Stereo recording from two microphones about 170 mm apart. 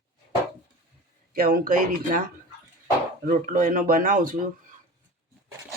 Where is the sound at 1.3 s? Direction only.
60° right (ahead or behind).